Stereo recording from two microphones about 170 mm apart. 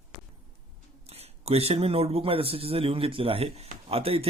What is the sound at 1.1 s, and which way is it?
Speech, 35° right (ahead or behind).